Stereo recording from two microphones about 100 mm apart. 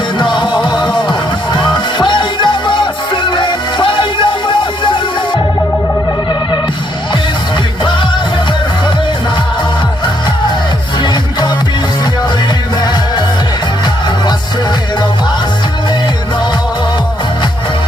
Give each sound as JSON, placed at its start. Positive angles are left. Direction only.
{"t": 0.2, "sound": "music", "side_deg": 50}
{"t": 11.0, "sound": "music", "side_deg": 45}